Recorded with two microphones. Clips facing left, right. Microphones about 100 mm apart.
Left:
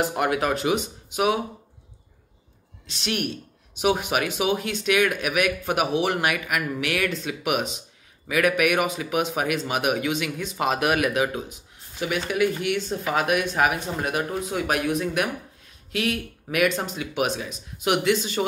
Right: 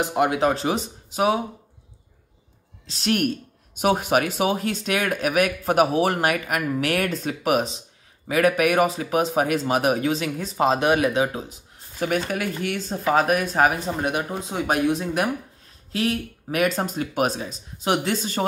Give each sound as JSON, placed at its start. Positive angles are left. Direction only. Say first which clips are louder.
{"t": 0.0, "sound": "speech", "louder": "right 3 dB", "side_deg": -20}
{"t": 2.9, "sound": "speech", "louder": "right 5 dB", "side_deg": -40}
{"t": 12.0, "sound": "speech", "louder": "left 1 dB", "side_deg": -45}